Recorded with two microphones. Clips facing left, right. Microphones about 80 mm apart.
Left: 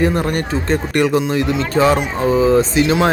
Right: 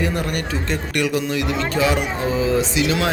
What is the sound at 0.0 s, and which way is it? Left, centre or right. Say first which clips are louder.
A man's voice: left 6 dB; left.